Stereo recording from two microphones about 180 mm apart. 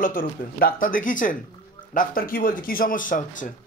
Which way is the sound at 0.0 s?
50° left (ahead or behind).